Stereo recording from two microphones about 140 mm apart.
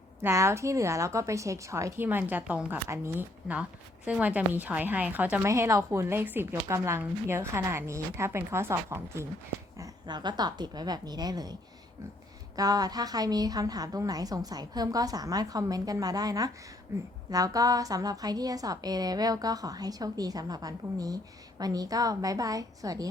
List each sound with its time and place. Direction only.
0.2 s a woman's voice: 20° right (ahead or behind)
12.5 s a woman's voice: 25° right (ahead or behind)